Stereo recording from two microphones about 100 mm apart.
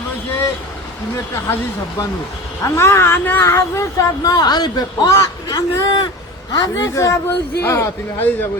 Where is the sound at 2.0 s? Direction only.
35° left (ahead or behind).